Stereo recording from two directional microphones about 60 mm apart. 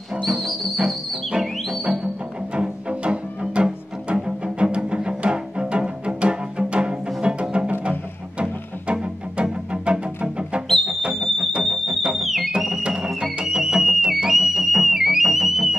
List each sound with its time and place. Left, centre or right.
0.2 s music: centre
2.5 s music: centre
10.7 s music: centre